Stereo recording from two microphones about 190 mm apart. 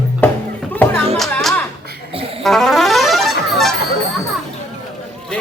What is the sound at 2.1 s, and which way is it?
Saxophone, 30° right (ahead or behind).